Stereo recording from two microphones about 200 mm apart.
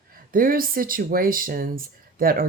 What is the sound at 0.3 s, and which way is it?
Speech, 45° right (ahead or behind).